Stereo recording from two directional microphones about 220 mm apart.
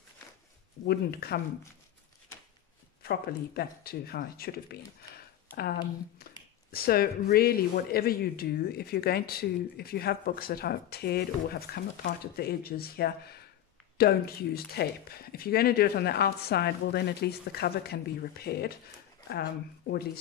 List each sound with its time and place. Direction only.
0.8 s speech: 45° left (ahead or behind)
3.0 s speech: 45° left (ahead or behind)